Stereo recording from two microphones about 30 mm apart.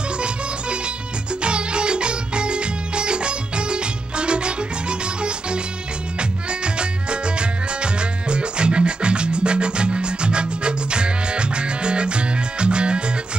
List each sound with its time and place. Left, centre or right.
0.2 s music: right